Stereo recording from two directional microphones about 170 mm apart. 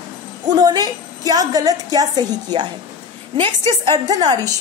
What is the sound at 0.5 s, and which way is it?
A woman's voice, 25° right (ahead or behind).